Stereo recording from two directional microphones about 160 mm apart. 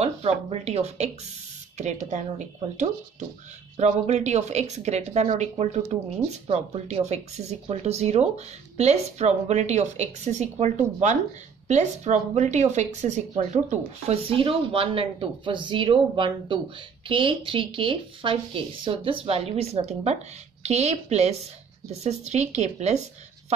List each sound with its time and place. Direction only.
0.0 s speech: 40° right (ahead or behind)